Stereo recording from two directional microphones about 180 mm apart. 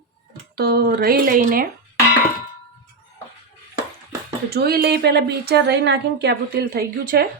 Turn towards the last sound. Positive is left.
turn(degrees=-55)  # may be behind; listen again after turning